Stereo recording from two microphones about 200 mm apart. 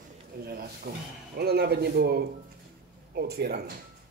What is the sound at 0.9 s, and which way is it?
Speech, 50° right (ahead or behind).